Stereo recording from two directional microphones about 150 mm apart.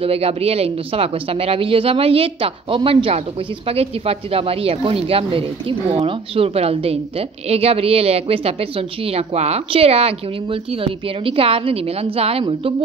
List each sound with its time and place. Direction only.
0.0 s speech: 40° right (ahead or behind)